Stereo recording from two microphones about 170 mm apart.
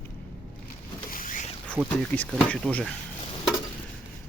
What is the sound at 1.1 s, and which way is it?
Boat, 50° left (ahead or behind).